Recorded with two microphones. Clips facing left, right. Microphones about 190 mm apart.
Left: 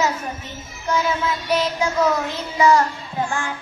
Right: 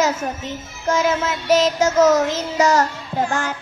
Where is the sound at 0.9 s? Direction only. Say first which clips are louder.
Right 3 dB; 90° right.